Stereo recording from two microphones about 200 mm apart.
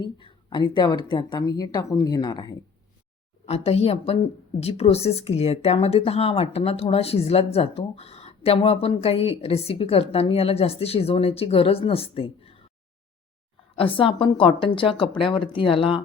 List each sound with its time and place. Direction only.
0.0 s speech: 25° left (ahead or behind)
3.4 s a woman's voice: 30° left (ahead or behind)
13.7 s speech: 25° left (ahead or behind)